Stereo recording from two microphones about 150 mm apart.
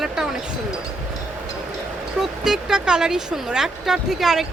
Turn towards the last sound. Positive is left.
turn(degrees=0)  # may be behind; listen again after turning